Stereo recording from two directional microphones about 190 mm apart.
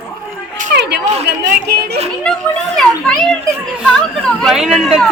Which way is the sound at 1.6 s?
60° right (ahead or behind).